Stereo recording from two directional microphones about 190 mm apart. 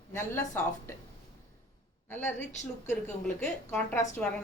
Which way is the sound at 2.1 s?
10° left (ahead or behind).